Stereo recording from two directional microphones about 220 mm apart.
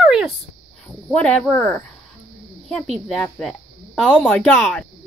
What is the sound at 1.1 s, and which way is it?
Speech, 5° left (ahead or behind).